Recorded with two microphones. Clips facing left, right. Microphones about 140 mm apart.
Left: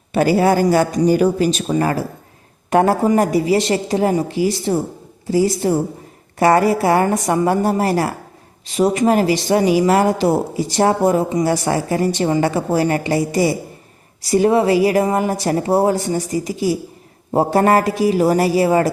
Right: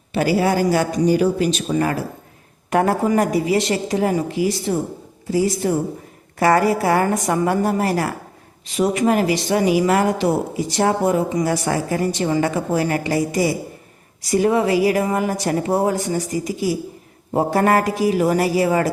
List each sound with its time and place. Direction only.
0.1 s speech: 50° left (ahead or behind); by 18.9 s 30° left (ahead or behind)